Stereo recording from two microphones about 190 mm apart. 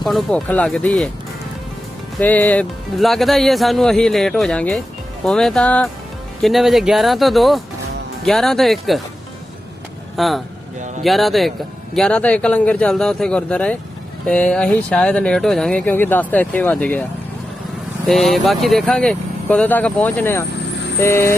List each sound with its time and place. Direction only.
0.0 s speech: centre (ahead or behind)
2.2 s speech: 10° left (ahead or behind)
10.2 s speech: centre (ahead or behind)